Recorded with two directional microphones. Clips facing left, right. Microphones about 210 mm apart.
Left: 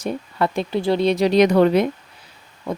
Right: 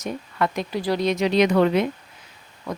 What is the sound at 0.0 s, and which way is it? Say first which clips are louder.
Speech: left 3 dB; 30° left (ahead or behind).